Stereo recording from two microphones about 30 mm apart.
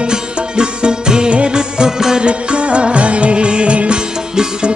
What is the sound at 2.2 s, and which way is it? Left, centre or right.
Music, right.